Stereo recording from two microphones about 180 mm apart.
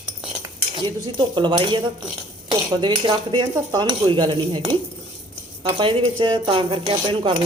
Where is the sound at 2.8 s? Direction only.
25° right (ahead or behind).